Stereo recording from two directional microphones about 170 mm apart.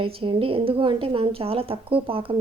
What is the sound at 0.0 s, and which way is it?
Speech, 30° right (ahead or behind).